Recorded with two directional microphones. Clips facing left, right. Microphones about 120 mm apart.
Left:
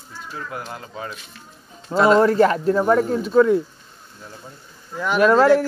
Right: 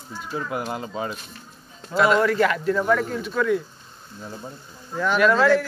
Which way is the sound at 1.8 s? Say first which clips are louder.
Left 4 dB; 35° left (ahead or behind).